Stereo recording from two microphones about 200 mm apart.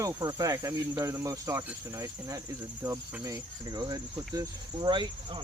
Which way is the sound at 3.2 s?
20° right (ahead or behind).